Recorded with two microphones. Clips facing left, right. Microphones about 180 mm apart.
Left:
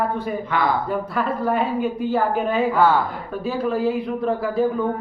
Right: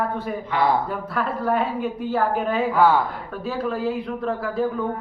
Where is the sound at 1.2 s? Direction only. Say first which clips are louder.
Even; centre (ahead or behind).